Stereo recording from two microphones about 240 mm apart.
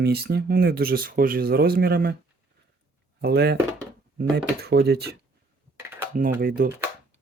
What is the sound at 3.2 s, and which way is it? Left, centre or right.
Speech, right.